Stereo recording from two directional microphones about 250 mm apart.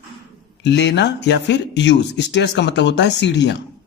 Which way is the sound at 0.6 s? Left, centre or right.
Left.